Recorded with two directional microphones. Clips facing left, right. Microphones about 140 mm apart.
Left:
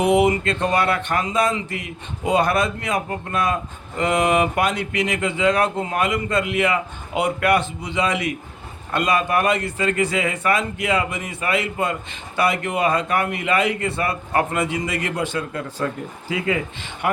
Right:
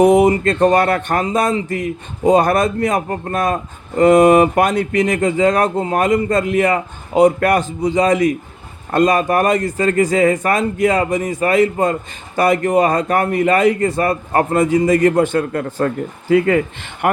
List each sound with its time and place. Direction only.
0.0 s speech: 40° right (ahead or behind)